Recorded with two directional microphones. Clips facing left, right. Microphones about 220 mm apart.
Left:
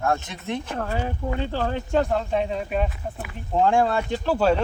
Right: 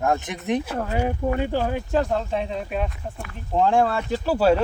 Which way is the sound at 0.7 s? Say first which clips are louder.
Right 3 dB; 15° right (ahead or behind).